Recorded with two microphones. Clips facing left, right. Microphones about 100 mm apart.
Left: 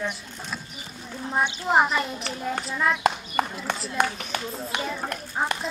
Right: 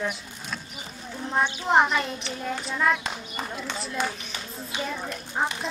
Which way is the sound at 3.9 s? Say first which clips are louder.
Left 5 dB; 60° left (ahead or behind).